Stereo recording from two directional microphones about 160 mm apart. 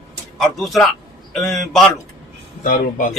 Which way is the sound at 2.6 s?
55° left (ahead or behind).